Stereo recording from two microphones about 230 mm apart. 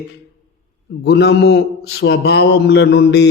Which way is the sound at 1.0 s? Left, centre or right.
Left.